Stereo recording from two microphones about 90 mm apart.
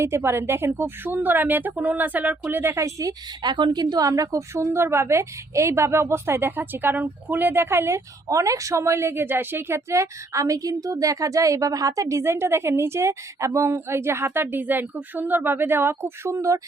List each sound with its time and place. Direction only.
0.0 s a woman's voice: 30° right (ahead or behind)